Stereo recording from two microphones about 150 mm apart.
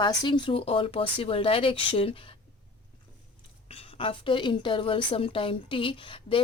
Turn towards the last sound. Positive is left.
turn(degrees=35)  # may be behind; listen again after turning